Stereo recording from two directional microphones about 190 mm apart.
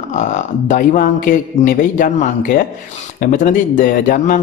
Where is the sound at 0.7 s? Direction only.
45° left (ahead or behind).